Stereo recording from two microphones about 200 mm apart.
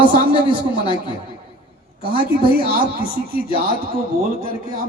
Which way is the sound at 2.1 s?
25° left (ahead or behind).